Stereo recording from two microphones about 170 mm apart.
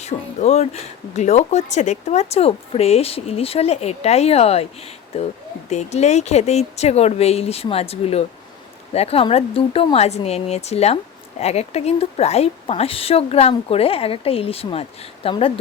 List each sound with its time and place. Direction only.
0.0 s speech: 40° left (ahead or behind)